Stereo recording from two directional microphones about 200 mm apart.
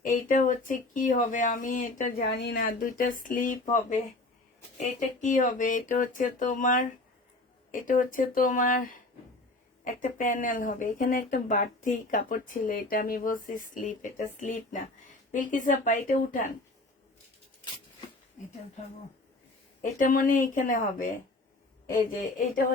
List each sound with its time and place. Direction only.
0.0 s speech: 40° left (ahead or behind)
19.8 s speech: 40° left (ahead or behind)